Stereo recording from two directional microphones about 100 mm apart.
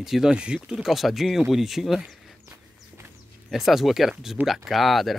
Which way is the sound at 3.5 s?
5° right (ahead or behind).